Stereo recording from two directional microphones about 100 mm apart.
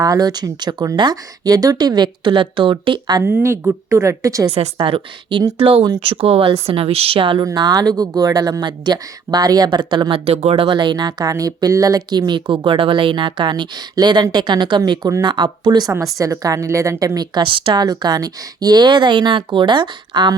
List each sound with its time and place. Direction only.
0.0 s speech: 40° right (ahead or behind)
3.2 s a woman's voice: 25° right (ahead or behind)
4.5 s a woman's voice: 75° right (ahead or behind)
7.4 s speech: 45° right (ahead or behind)
10.2 s speech: 85° right; by 17.2 s 30° right (ahead or behind)
17.2 s speech: 50° right (ahead or behind)